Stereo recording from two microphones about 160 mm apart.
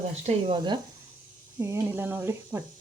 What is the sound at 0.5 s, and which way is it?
Speech, 30° right (ahead or behind).